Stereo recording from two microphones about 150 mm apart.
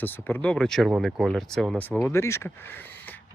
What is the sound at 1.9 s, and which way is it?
Speech, 15° left (ahead or behind).